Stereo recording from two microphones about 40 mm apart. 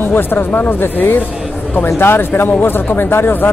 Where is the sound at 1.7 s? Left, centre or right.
Left.